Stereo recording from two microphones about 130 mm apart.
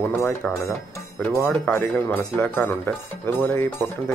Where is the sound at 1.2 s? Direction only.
20° left (ahead or behind).